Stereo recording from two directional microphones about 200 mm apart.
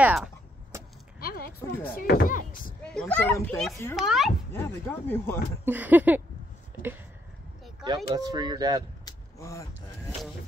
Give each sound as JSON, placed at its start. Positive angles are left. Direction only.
{"t": 0.0, "sound": "speech", "side_deg": -5}
{"t": 1.2, "sound": "speech", "side_deg": 45}
{"t": 2.8, "sound": "speech", "side_deg": 5}
{"t": 4.5, "sound": "speech", "side_deg": 10}
{"t": 5.7, "sound": "a sound", "side_deg": -10}
{"t": 8.1, "sound": "speech", "side_deg": -20}
{"t": 9.0, "sound": "a sound", "side_deg": 15}